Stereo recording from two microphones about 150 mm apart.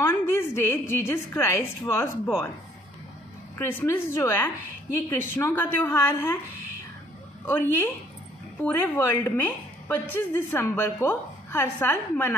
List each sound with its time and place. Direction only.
0.0 s a woman's voice: 15° left (ahead or behind)
3.5 s a woman's voice: 15° left (ahead or behind)
7.4 s a woman's voice: 15° left (ahead or behind)